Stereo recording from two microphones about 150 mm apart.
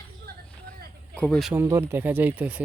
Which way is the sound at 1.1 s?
10° left (ahead or behind).